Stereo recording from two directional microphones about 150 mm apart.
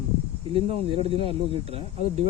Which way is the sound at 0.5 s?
40° right (ahead or behind).